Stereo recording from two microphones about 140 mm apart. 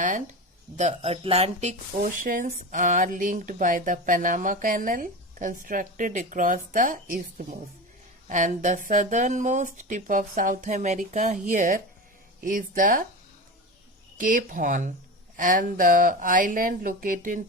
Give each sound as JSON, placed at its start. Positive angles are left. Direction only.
{"t": 0.0, "sound": "speech", "side_deg": -65}
{"t": 0.8, "sound": "speech", "side_deg": -50}
{"t": 2.0, "sound": "speech", "side_deg": -80}
{"t": 12.4, "sound": "speech", "side_deg": -75}
{"t": 14.2, "sound": "speech", "side_deg": -70}